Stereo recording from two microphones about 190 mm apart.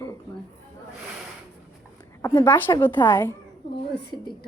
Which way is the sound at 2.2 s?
25° left (ahead or behind).